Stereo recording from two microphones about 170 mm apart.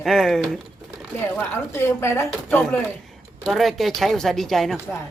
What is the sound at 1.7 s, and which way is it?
Speech, 15° left (ahead or behind).